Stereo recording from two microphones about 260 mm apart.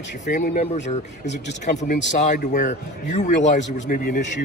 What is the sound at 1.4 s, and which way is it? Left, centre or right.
Speech, left.